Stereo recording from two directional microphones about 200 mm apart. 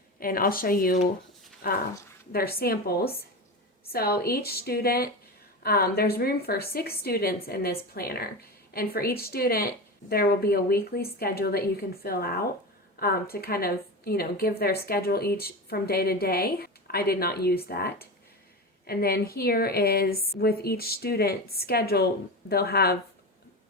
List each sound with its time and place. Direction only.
0.2 s speech: 45° left (ahead or behind)